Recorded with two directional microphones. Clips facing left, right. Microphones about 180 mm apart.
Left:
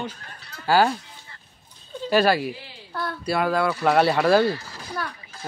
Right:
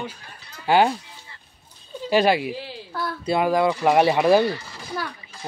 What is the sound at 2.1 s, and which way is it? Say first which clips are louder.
A child's voice: right 1 dB; 15° right (ahead or behind).